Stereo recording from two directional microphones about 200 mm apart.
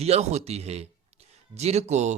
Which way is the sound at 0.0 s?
30° right (ahead or behind).